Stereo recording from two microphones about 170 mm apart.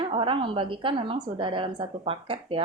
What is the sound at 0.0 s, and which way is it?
A woman's voice, 30° right (ahead or behind).